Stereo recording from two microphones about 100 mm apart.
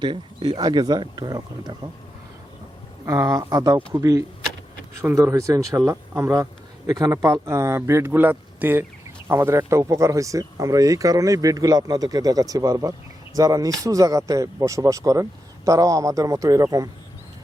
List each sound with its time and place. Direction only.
0.0 s speech: 55° right (ahead or behind)
3.1 s a man's voice: 30° right (ahead or behind)